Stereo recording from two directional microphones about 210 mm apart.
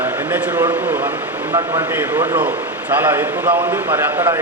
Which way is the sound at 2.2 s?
20° right (ahead or behind).